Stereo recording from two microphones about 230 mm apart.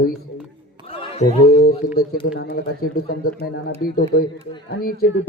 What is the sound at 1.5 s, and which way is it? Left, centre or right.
A man's voice, left.